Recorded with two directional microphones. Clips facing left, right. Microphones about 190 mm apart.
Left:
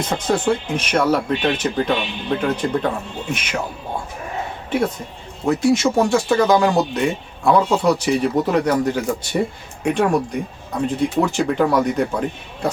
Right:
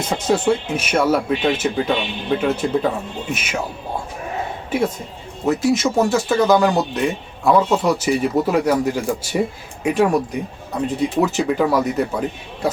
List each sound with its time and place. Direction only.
0.1 s speech: 10° right (ahead or behind)
5.5 s speech: centre (ahead or behind)